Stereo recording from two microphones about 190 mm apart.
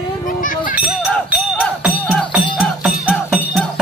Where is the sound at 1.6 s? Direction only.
5° left (ahead or behind).